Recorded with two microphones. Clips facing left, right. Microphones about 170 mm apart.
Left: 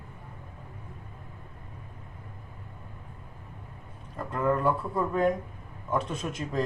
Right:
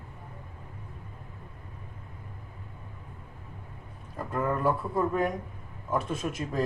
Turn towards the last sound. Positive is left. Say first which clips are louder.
# even
turn(degrees=-5)  # may be behind; listen again after turning